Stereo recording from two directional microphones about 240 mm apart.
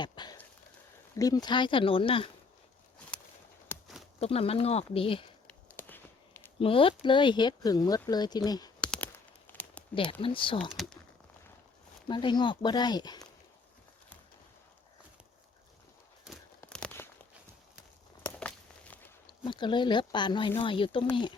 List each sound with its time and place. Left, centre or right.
0.0 s a sound: centre
1.1 s speech: centre
3.7 s horse: centre
4.2 s speech: left
5.5 s a sound: centre
6.6 s speech: left
8.8 s a sound: centre
9.9 s speech: left
10.6 s speech: centre
12.0 s speech: centre
16.6 s a sound: centre
18.3 s walk: centre
19.3 s speech: centre